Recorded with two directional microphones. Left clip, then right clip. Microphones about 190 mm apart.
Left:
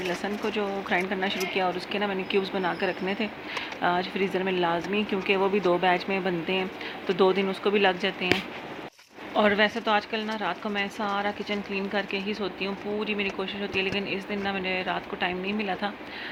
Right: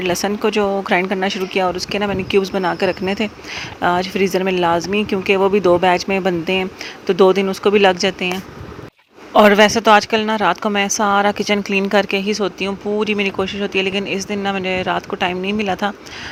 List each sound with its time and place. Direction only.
0.0 s speech: 50° right (ahead or behind)
9.3 s speech: 50° right (ahead or behind)